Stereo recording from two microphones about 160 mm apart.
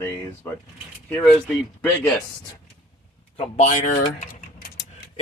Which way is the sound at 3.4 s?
40° left (ahead or behind).